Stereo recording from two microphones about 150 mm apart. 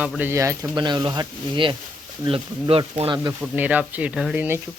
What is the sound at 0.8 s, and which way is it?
Speech, 30° right (ahead or behind).